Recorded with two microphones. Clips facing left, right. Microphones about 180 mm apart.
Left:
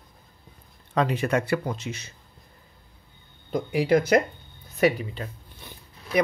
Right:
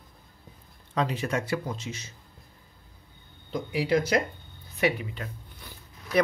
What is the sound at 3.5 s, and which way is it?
Speech, 55° left (ahead or behind).